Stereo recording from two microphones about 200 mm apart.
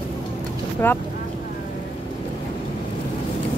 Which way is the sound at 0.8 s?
10° left (ahead or behind).